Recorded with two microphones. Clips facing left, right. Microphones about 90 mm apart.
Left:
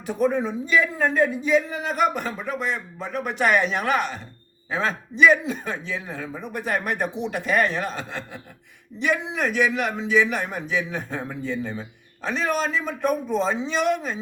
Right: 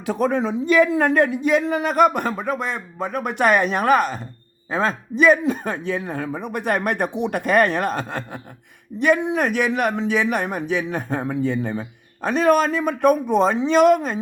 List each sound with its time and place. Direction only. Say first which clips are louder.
0.0 s a man's voice: right 2 dB; 90° right; by 14.2 s 50° right (ahead or behind)